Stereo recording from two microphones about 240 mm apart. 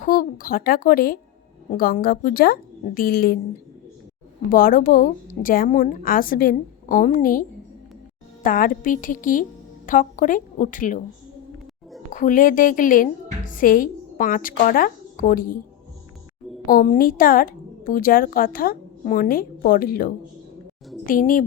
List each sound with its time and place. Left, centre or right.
0.0 s a woman's voice: left
4.5 s a woman's voice: left
8.4 s a woman's voice: left
12.1 s a woman's voice: left
16.6 s a woman's voice: left